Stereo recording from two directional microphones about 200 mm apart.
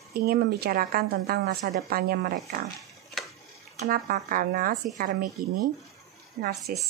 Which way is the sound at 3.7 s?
45° right (ahead or behind).